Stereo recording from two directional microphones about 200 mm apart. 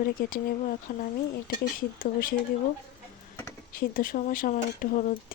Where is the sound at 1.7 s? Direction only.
45° left (ahead or behind).